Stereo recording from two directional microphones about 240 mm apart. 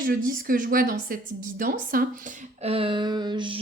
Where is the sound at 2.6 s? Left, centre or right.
Right.